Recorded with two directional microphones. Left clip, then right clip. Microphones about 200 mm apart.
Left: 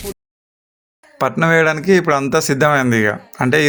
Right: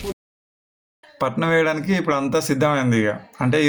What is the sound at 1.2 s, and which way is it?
A man's voice, 35° left (ahead or behind).